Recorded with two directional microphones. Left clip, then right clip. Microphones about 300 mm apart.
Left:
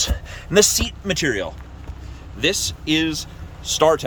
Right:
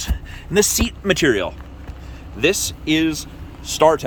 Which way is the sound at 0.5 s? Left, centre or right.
Centre.